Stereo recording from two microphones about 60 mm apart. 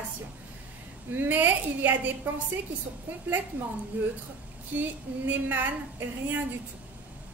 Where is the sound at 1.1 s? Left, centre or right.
Right.